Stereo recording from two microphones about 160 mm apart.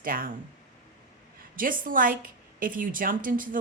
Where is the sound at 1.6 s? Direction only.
60° right (ahead or behind).